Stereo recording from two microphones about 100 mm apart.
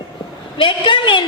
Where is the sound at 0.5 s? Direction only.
55° left (ahead or behind).